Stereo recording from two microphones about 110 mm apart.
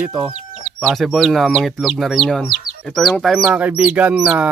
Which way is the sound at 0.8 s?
Centre (ahead or behind).